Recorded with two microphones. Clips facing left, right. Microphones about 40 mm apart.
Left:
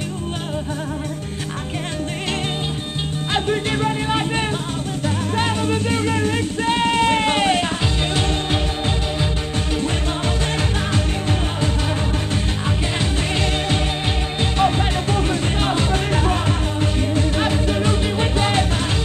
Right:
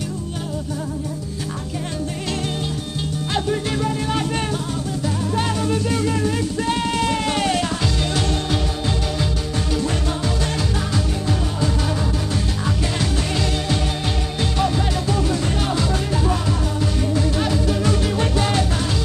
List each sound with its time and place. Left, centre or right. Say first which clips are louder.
3.3 s music: left 2 dB; left
14.6 s music: left 3 dB; left